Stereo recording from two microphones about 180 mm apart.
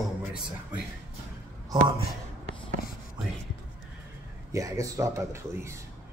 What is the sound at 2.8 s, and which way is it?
Whispering, 55° left (ahead or behind).